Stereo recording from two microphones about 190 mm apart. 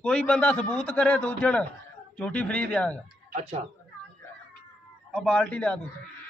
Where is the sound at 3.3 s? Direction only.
35° right (ahead or behind).